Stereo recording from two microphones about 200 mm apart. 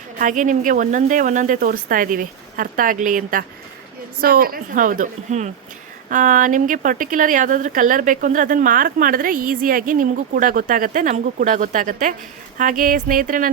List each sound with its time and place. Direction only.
0.2 s a woman's voice: 40° right (ahead or behind)